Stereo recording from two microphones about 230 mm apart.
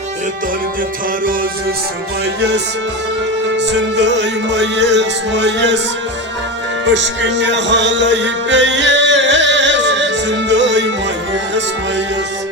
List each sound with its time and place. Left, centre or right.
3.6 s music: right
6.9 s music: right